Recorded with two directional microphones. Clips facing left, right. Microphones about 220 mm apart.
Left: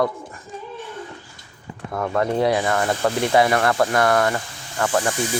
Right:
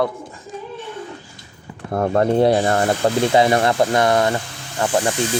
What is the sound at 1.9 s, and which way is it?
Speech, 35° right (ahead or behind).